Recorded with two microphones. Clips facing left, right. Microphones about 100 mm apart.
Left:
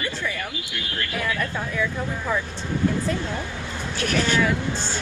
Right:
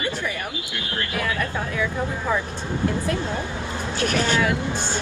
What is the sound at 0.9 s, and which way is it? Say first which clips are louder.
Speech: right 1 dB; 25° right (ahead or behind).